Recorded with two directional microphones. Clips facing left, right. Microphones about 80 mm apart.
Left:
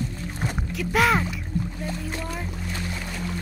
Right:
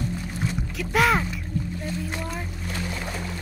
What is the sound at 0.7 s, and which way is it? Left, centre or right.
Speech, centre.